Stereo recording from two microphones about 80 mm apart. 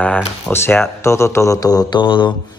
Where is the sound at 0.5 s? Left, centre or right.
Left.